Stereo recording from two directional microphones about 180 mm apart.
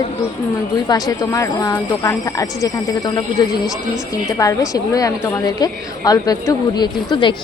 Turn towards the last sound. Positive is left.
turn(degrees=25)  # may be behind; listen again after turning